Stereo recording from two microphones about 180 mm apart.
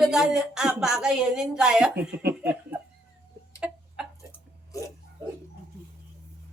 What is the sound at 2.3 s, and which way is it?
Laughter, 10° right (ahead or behind).